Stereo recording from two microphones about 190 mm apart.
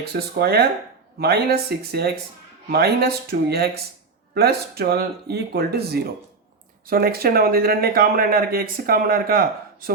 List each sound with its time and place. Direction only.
0.0 s speech: 55° right (ahead or behind)